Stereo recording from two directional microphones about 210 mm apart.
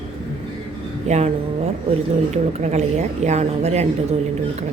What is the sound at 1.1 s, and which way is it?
Speech, 35° right (ahead or behind).